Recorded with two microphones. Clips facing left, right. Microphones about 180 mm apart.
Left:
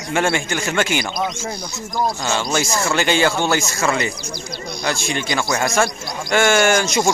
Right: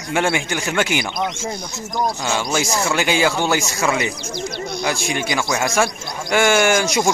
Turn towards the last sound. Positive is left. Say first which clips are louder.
# even
turn(degrees=-15)  # may be behind; listen again after turning